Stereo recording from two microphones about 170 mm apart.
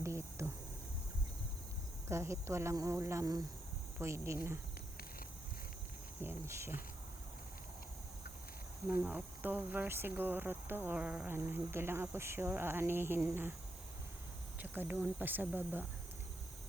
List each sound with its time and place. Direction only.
0.0 s insect: 15° right (ahead or behind)
2.0 s speech: 15° right (ahead or behind)
6.2 s speech: 15° right (ahead or behind)
8.9 s speech: 10° right (ahead or behind)
14.6 s speech: 10° right (ahead or behind)